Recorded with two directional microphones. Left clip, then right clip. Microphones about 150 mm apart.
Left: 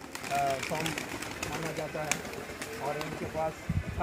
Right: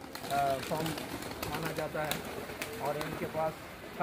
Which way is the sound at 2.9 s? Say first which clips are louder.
Even; 10° left (ahead or behind).